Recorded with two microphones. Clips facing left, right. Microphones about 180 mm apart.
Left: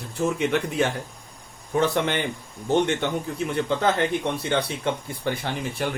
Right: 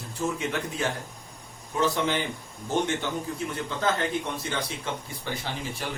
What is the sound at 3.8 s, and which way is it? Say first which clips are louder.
Speech: left 1 dB; 60° left (ahead or behind).